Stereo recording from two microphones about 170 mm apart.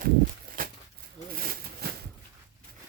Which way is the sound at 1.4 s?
60° right (ahead or behind).